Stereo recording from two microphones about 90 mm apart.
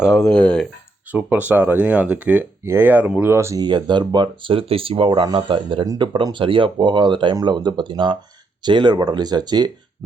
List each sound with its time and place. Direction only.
0.2 s speech: 10° left (ahead or behind)
1.1 s speech: 20° right (ahead or behind)
3.6 s speech: 55° right (ahead or behind); by 5.2 s 80° right
5.2 s speech: 60° right (ahead or behind)
6.3 s speech: 70° right (ahead or behind); by 9.7 s 50° right (ahead or behind)